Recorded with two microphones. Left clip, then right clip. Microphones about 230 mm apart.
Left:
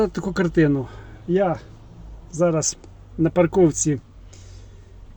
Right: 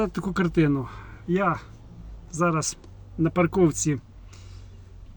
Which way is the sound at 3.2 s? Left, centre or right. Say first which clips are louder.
Left 5 dB; centre.